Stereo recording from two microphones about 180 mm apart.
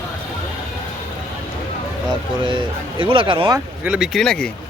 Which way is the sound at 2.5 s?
25° right (ahead or behind).